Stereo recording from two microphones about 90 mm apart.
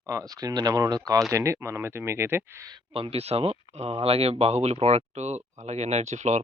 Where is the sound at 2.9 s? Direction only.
90° right.